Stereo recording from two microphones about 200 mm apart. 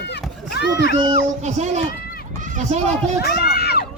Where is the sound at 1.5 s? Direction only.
35° right (ahead or behind).